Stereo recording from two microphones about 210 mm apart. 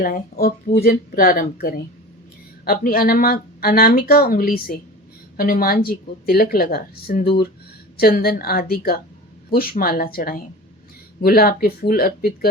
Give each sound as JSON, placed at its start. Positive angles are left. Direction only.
{"t": 0.0, "sound": "speech", "side_deg": 45}